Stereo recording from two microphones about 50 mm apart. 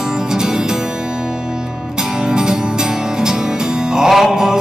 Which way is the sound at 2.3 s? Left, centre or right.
Centre.